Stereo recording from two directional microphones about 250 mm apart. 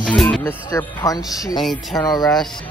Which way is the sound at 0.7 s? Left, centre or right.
Centre.